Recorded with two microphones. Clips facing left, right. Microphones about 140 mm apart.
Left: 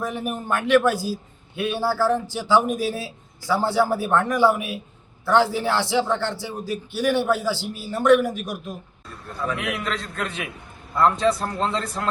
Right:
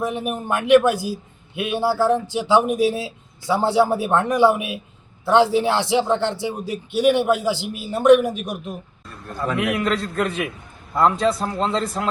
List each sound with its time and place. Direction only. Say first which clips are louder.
0.0 s a man's voice: right 3 dB; 15° right (ahead or behind)
9.8 s a man's voice: right 7 dB; centre (ahead or behind)